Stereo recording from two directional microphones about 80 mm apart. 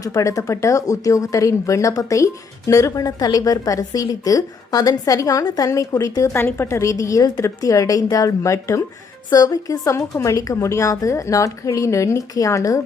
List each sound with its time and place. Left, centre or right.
0.0 s speech: left
6.3 s speech: left
9.3 s speech: left